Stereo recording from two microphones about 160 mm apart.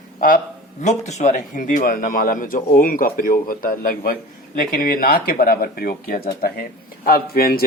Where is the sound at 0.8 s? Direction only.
45° left (ahead or behind).